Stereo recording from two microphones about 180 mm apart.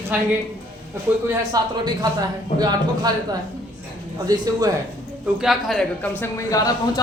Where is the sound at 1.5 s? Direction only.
20° right (ahead or behind).